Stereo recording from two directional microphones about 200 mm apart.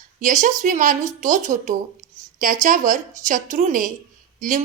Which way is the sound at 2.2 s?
40° right (ahead or behind).